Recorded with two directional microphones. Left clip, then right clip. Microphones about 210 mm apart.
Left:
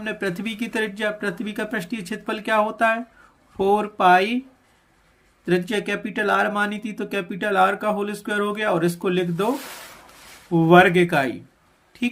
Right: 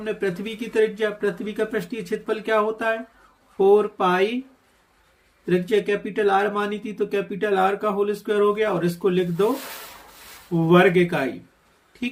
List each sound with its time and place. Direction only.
0.0 s speech: 40° left (ahead or behind)
5.5 s speech: 40° left (ahead or behind)
10.6 s speech: 40° left (ahead or behind)